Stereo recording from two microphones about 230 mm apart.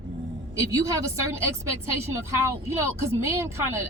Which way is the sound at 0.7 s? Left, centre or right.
Centre.